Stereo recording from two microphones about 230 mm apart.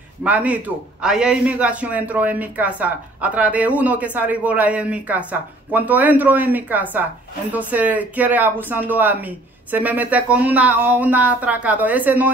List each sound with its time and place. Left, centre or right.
0.2 s a man's voice: centre